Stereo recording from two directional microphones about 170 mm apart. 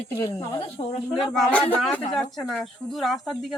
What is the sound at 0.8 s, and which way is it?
Speech, 30° left (ahead or behind).